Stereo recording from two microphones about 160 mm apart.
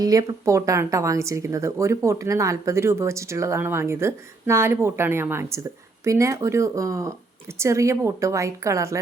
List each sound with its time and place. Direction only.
0.0 s speech: 20° right (ahead or behind)